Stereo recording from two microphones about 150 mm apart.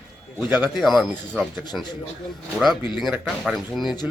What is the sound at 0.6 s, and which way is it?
Speech, centre (ahead or behind).